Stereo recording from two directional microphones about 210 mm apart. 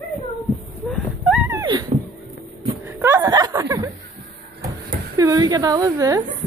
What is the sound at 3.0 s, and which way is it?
Chuckle, 10° right (ahead or behind).